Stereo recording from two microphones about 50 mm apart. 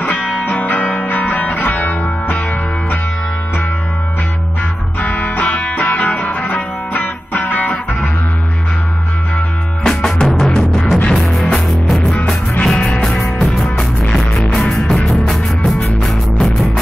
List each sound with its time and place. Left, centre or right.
0.4 s music: left
5.0 s music: left
9.8 s music: centre
12.6 s music: left
13.2 s music: centre
14.0 s music: centre
14.4 s music: centre